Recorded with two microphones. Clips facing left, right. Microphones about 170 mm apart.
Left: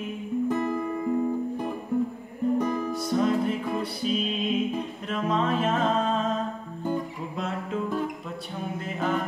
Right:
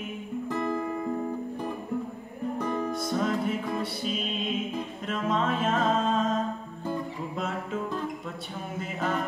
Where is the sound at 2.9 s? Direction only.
Centre (ahead or behind).